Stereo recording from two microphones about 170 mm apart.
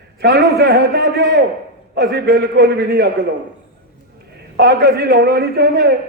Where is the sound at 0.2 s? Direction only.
75° right (ahead or behind).